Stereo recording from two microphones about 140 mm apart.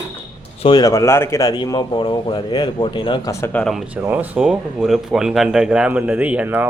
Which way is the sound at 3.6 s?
Centre (ahead or behind).